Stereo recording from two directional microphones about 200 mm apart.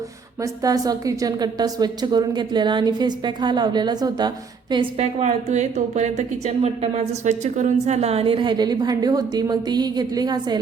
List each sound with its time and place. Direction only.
0.6 s a woman's voice: 20° right (ahead or behind)